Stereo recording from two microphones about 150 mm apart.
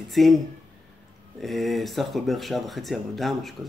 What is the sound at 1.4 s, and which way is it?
Speech, centre (ahead or behind).